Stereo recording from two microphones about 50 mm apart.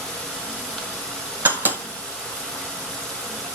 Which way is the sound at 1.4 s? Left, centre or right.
Right.